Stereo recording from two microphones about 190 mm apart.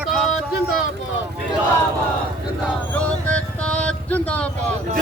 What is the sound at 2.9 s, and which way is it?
Speech, 5° left (ahead or behind).